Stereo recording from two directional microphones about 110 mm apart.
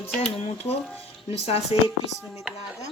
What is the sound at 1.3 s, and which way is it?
Speech, 65° left (ahead or behind).